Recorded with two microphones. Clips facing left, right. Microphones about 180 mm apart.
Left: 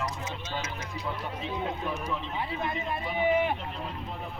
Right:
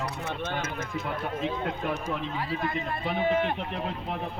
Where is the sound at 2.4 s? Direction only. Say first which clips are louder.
Right 2 dB; 20° left (ahead or behind).